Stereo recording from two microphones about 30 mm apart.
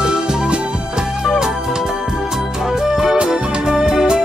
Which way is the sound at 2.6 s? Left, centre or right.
Centre.